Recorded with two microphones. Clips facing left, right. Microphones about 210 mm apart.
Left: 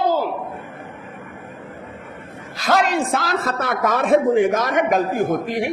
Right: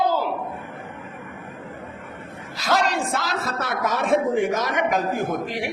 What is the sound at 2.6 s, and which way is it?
A man's voice, 50° left (ahead or behind).